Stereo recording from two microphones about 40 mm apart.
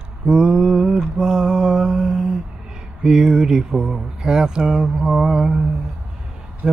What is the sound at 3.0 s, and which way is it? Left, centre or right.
Speech, centre.